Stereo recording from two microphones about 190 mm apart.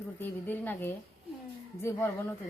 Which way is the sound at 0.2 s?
10° left (ahead or behind).